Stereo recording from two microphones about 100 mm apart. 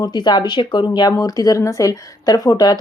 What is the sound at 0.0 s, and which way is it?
Speech, 45° left (ahead or behind).